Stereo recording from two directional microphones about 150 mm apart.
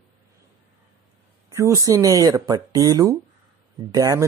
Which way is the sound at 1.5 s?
20° right (ahead or behind).